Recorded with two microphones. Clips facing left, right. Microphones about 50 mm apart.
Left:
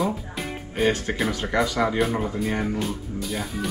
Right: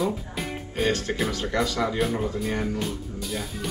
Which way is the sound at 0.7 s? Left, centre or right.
Centre.